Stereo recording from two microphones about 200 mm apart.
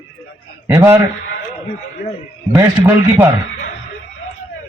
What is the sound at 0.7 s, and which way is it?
Speech, 15° right (ahead or behind).